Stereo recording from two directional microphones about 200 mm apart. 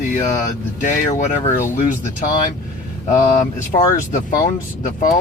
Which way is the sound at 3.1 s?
40° left (ahead or behind).